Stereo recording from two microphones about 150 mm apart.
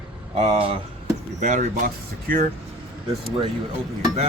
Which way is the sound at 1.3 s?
55° right (ahead or behind).